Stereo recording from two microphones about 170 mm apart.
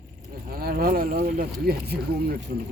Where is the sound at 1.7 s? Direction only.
70° right (ahead or behind).